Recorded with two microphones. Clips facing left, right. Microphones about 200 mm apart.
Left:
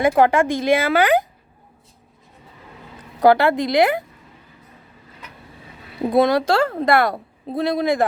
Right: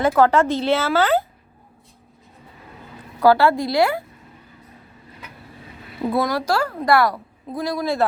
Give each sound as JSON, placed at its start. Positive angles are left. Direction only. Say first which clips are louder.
{"t": 0.2, "sound": "speech", "louder": "even", "side_deg": 15}
{"t": 3.2, "sound": "speech", "louder": "left 1 dB", "side_deg": 20}
{"t": 6.0, "sound": "speech", "louder": "left 5 dB", "side_deg": 20}